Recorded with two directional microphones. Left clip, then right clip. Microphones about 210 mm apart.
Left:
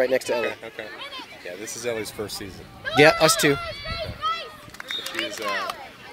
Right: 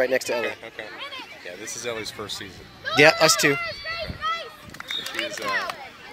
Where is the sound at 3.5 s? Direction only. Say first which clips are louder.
Right 1 dB; 35° right (ahead or behind).